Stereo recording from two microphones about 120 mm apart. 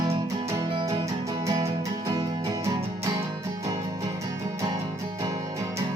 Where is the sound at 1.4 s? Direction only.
30° right (ahead or behind).